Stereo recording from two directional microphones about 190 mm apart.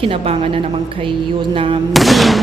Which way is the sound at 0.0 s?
30° right (ahead or behind).